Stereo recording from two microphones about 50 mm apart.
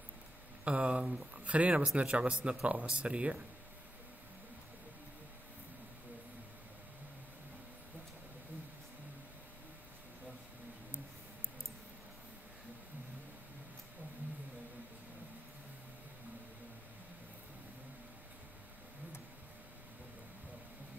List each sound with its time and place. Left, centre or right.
0.7 s speech: right